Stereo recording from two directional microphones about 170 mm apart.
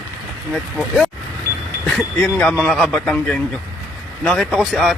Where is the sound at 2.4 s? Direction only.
5° left (ahead or behind).